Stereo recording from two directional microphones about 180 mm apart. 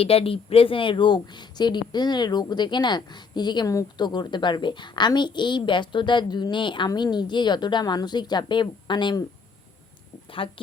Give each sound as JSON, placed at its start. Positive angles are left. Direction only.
{"t": 0.0, "sound": "speech", "side_deg": 30}
{"t": 10.4, "sound": "speech", "side_deg": 30}